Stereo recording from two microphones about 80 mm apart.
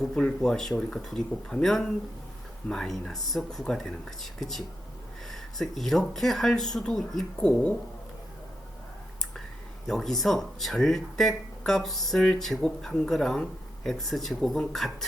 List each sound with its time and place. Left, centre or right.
0.0 s speech: centre
9.8 s speech: centre